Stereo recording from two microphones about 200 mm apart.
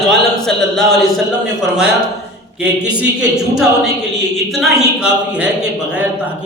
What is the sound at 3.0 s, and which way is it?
Speech, 5° right (ahead or behind).